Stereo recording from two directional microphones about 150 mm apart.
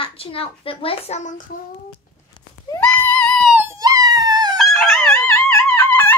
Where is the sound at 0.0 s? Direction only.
40° left (ahead or behind).